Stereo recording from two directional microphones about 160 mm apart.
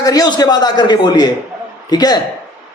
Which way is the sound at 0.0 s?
25° left (ahead or behind).